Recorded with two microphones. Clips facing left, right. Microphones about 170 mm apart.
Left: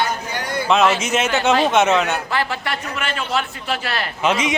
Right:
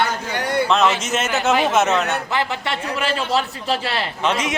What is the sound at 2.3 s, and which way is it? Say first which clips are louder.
A man's voice: even; 20° right (ahead or behind).